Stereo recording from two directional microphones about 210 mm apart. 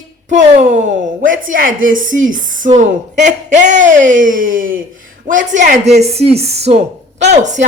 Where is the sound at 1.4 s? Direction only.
40° right (ahead or behind).